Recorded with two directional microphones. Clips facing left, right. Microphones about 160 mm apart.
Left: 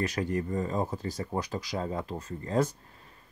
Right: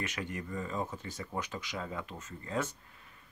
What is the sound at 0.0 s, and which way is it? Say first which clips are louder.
Speech: left 9 dB; 35° left (ahead or behind).